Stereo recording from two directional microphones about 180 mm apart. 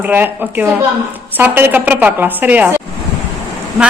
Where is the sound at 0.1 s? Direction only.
10° right (ahead or behind).